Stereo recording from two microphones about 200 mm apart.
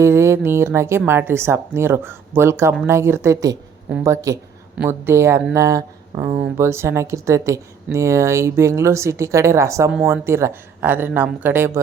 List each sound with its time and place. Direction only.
0.0 s speech: 15° right (ahead or behind)